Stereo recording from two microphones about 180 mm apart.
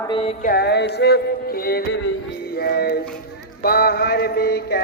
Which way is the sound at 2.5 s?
60° left (ahead or behind).